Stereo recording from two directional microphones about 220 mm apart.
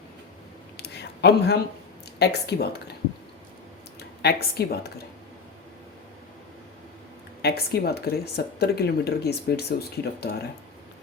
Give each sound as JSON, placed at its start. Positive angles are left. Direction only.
{"t": 0.8, "sound": "a sound", "side_deg": 50}
{"t": 2.1, "sound": "speech", "side_deg": 50}
{"t": 4.2, "sound": "speech", "side_deg": 45}
{"t": 7.4, "sound": "speech", "side_deg": 45}